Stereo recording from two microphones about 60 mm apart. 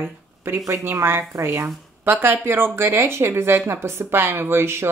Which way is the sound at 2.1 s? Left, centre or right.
Right.